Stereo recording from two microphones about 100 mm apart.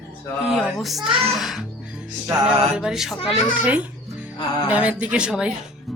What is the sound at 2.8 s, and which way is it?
Speech, 5° right (ahead or behind).